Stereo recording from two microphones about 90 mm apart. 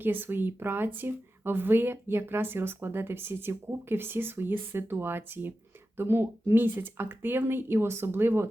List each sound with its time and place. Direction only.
0.0 s speech: 25° right (ahead or behind)